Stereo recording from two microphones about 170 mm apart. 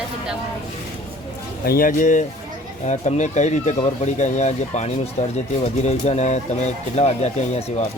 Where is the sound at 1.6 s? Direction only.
60° left (ahead or behind); by 7.9 s 40° left (ahead or behind).